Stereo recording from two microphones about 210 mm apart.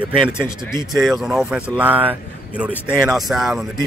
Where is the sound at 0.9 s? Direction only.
Centre (ahead or behind).